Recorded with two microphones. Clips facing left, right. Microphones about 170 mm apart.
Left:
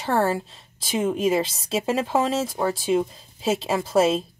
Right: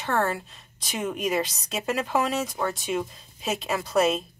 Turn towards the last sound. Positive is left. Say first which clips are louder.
# left 3 dB
turn(degrees=30)  # may be behind; listen again after turning